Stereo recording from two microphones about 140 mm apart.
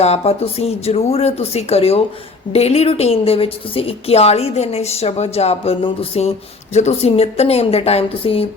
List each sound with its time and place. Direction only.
0.0 s a woman's voice: 50° left (ahead or behind)